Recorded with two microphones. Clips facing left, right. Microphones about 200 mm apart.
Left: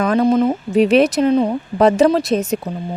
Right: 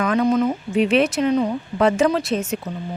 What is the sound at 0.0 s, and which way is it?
A woman's voice, 35° left (ahead or behind).